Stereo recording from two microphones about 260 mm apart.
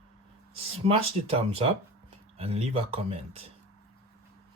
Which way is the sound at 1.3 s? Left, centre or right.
Right.